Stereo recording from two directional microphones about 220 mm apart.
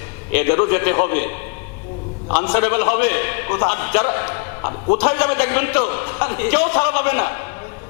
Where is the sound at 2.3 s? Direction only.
20° left (ahead or behind).